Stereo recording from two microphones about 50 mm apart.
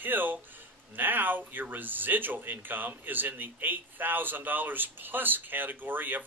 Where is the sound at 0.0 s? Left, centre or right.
Right.